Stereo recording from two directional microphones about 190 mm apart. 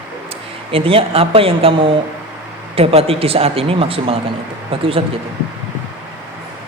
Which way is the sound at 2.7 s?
30° right (ahead or behind).